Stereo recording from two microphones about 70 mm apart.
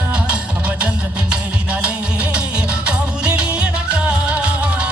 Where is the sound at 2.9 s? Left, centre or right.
Centre.